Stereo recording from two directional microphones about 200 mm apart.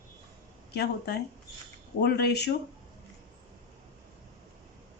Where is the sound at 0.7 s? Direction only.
55° left (ahead or behind).